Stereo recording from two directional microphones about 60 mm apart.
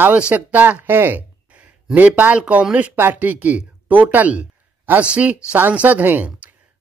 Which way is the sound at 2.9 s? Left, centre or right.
Right.